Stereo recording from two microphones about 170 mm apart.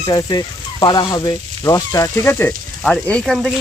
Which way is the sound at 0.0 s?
25° left (ahead or behind).